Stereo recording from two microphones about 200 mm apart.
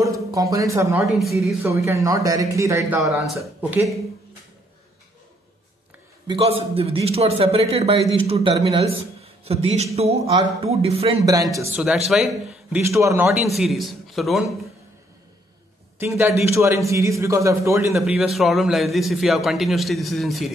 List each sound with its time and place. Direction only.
0.0 s a man's voice: 15° right (ahead or behind)
3.0 s a man's voice: centre (ahead or behind)
6.2 s a man's voice: 25° right (ahead or behind)
11.5 s a man's voice: 15° right (ahead or behind)
12.1 s a man's voice: centre (ahead or behind)
12.8 s a man's voice: 15° right (ahead or behind)
16.0 s a man's voice: 15° right (ahead or behind)
17.9 s a man's voice: centre (ahead or behind)